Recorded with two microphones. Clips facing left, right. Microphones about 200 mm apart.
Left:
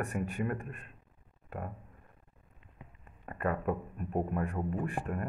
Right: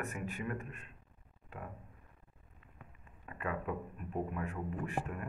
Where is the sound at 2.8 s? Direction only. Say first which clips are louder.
Left 4 dB; 20° left (ahead or behind).